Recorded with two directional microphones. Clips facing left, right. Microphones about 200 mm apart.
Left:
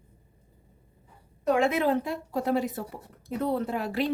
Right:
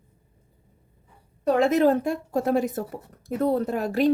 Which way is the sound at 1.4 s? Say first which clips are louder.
Right 5 dB; 35° right (ahead or behind).